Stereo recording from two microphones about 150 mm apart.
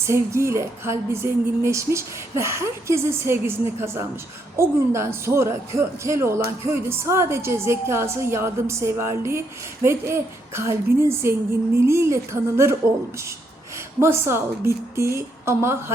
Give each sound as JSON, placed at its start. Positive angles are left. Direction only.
{"t": 0.0, "sound": "speech", "side_deg": -20}
{"t": 14.0, "sound": "speech", "side_deg": -15}